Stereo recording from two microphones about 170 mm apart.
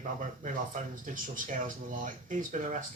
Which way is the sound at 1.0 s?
50° right (ahead or behind).